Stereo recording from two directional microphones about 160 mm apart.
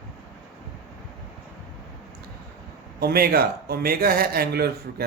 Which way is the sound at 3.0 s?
75° right (ahead or behind).